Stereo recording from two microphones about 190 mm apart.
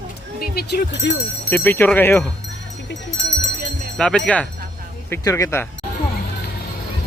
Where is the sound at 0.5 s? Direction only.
55° left (ahead or behind).